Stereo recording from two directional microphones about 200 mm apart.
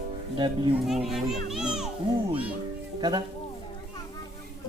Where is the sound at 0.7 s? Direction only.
Centre (ahead or behind).